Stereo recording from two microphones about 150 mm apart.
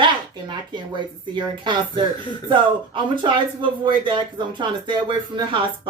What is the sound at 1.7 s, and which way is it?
Speech, 30° right (ahead or behind).